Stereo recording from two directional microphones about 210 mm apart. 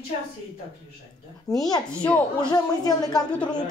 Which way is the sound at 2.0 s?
5° left (ahead or behind).